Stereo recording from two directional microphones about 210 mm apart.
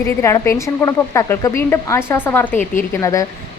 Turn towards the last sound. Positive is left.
turn(degrees=15)  # may be behind; listen again after turning